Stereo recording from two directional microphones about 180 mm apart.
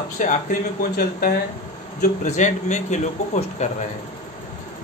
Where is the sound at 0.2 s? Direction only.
45° left (ahead or behind).